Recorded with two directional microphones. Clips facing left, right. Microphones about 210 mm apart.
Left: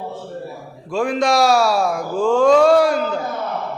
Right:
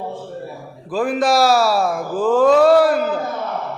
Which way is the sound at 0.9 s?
5° right (ahead or behind).